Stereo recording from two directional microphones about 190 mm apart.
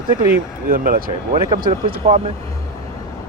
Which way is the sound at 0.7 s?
50° right (ahead or behind).